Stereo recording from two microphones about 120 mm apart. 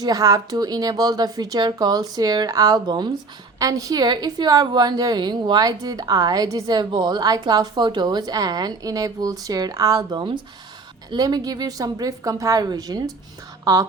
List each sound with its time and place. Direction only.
0.0 s a woman's voice: 30° right (ahead or behind)
10.2 s a woman's voice: 40° right (ahead or behind)